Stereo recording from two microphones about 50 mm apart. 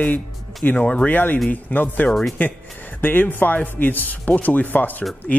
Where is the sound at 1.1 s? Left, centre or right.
Left.